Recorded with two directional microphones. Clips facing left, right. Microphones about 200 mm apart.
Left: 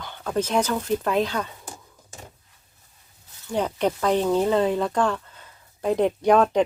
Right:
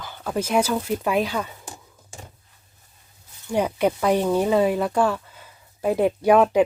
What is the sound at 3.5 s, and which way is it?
Speech, 10° right (ahead or behind).